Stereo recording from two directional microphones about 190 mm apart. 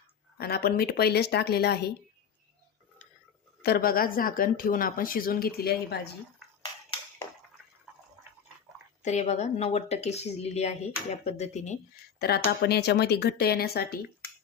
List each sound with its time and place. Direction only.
0.3 s speech: 55° left (ahead or behind)
3.6 s a woman's voice: 50° left (ahead or behind)
9.0 s speech: 35° left (ahead or behind)
12.2 s speech: 55° left (ahead or behind)